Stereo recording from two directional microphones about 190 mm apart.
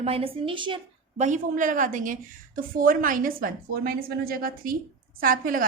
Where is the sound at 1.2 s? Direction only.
40° right (ahead or behind).